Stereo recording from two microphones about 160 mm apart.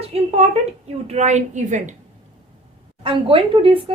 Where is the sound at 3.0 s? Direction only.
35° right (ahead or behind).